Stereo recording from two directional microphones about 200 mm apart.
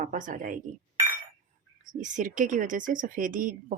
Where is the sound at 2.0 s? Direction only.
40° right (ahead or behind).